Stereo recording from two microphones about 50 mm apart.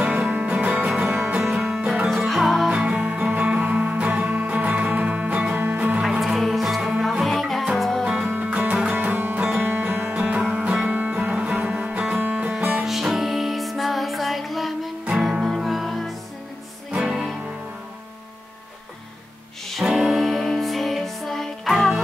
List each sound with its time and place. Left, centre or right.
0.0 s music: right
1.4 s music: centre
2.7 s music: right
5.9 s music: centre
8.0 s music: centre
8.5 s music: right
12.8 s music: centre
16.9 s music: right
19.8 s music: centre